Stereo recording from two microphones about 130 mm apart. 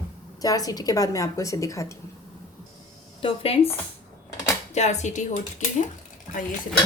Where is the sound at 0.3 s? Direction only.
30° left (ahead or behind).